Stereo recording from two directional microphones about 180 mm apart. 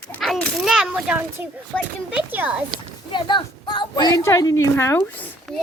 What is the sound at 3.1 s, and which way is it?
A woman's voice, 25° left (ahead or behind).